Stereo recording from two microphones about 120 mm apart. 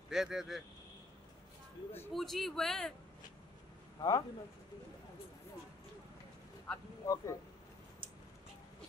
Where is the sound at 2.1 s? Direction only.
Centre (ahead or behind).